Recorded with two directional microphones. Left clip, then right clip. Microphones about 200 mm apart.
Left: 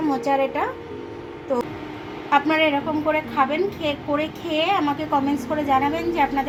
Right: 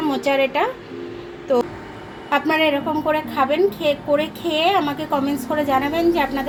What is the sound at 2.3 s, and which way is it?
A woman's voice, 45° right (ahead or behind).